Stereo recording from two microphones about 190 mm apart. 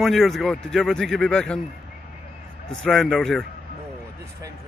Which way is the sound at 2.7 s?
Centre (ahead or behind).